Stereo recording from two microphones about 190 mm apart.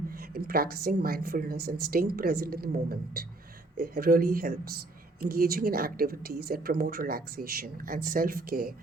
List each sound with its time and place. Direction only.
0.1 s speech: 50° right (ahead or behind)